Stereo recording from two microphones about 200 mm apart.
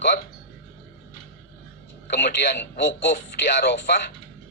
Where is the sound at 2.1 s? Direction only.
60° left (ahead or behind).